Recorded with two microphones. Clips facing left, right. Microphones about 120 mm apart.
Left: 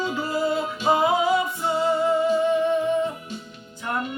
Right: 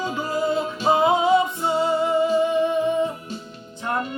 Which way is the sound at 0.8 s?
25° right (ahead or behind).